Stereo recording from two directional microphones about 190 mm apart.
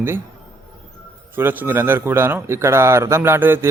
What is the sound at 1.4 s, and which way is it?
A man's voice, 10° right (ahead or behind).